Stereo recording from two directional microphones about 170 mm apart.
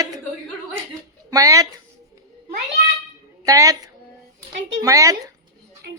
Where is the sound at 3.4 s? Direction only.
20° right (ahead or behind).